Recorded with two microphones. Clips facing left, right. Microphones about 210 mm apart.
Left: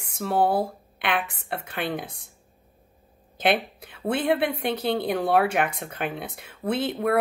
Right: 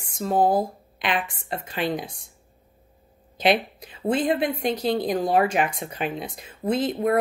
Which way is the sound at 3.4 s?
60° left (ahead or behind).